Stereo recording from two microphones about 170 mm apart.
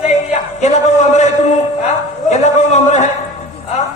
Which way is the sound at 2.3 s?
40° left (ahead or behind).